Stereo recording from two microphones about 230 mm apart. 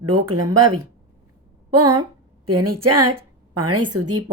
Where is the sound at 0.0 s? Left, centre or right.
Right.